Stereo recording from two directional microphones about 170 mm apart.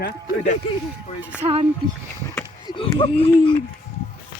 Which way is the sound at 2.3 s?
25° left (ahead or behind).